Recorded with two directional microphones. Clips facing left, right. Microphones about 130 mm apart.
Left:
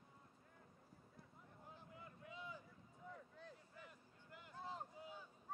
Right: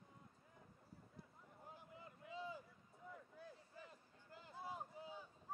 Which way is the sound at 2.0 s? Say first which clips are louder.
Right 5 dB; 30° right (ahead or behind).